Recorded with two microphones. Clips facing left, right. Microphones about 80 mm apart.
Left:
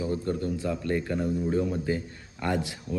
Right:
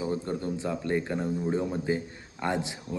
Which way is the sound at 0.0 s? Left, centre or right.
Right.